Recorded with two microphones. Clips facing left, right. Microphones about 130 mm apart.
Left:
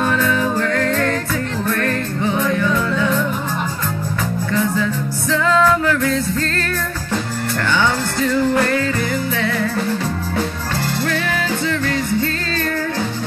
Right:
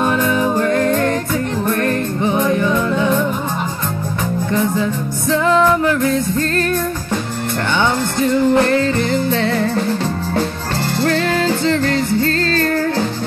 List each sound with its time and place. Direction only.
0.0 s music: 20° right (ahead or behind)
4.5 s music: 20° right (ahead or behind)
7.8 s music: 20° right (ahead or behind)
11.1 s music: 35° right (ahead or behind)
12.2 s music: 50° right (ahead or behind)